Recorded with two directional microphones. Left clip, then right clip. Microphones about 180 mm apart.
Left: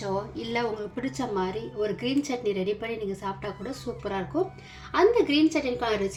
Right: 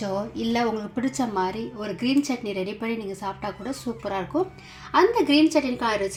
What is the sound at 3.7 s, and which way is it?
A woman's voice, 30° right (ahead or behind).